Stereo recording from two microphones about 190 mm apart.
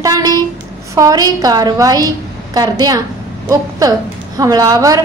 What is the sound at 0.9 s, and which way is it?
A woman's voice, 20° right (ahead or behind).